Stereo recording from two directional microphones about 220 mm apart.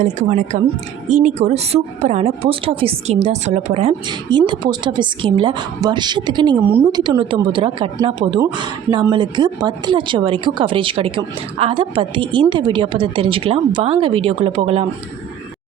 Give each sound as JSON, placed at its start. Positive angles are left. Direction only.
{"t": 0.0, "sound": "a woman's voice", "side_deg": -30}
{"t": 6.7, "sound": "a woman's voice", "side_deg": -10}
{"t": 7.0, "sound": "a woman's voice", "side_deg": -20}